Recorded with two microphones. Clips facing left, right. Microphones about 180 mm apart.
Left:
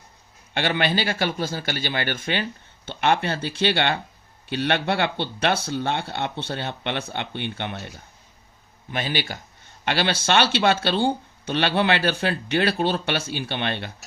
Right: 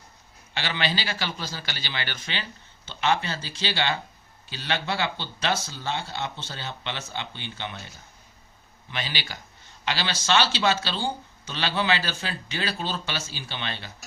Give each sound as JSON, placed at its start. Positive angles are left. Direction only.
{"t": 0.5, "sound": "a man's voice", "side_deg": 55}